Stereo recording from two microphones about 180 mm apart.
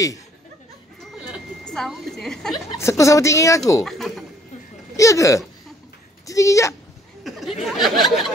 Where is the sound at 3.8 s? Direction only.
Centre (ahead or behind).